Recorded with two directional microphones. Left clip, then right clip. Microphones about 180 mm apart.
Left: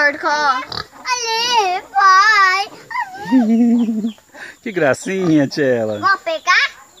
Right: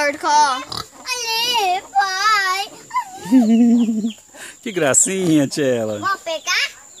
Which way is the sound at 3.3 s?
20° right (ahead or behind).